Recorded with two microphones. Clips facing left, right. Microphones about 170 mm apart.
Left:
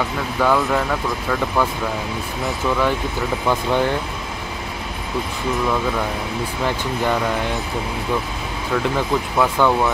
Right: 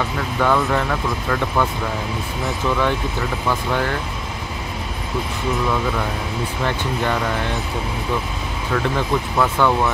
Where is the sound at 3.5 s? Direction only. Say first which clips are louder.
Left 3 dB; 15° left (ahead or behind).